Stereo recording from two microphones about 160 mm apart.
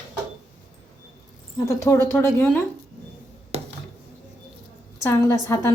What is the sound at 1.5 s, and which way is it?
A woman's voice, 20° left (ahead or behind).